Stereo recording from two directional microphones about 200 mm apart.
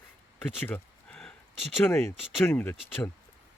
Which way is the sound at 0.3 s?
10° left (ahead or behind).